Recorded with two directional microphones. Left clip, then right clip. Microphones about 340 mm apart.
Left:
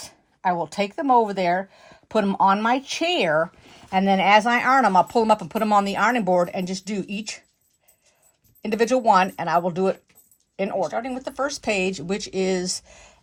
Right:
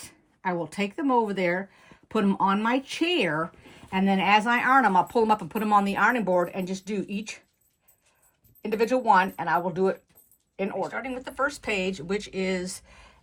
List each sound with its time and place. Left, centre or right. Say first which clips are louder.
0.0 s speech: left 7 dB; left
8.6 s speech: left 4 dB; left
10.9 s speech: left 4 dB; centre